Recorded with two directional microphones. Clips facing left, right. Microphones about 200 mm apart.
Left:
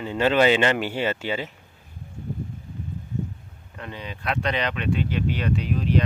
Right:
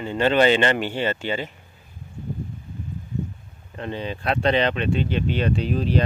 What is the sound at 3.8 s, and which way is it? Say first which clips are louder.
Speech: right 6 dB; 30° right (ahead or behind).